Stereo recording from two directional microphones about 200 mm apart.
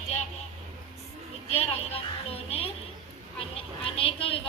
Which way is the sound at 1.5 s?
30° left (ahead or behind).